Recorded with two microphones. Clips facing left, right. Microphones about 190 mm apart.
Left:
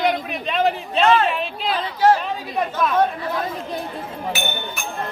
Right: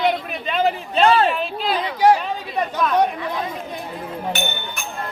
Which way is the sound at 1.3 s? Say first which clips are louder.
Right 1 dB; centre (ahead or behind).